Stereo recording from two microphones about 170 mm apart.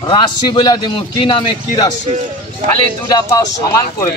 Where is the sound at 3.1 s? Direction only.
20° left (ahead or behind).